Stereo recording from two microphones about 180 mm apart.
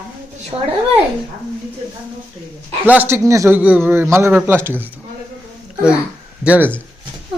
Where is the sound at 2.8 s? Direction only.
10° right (ahead or behind).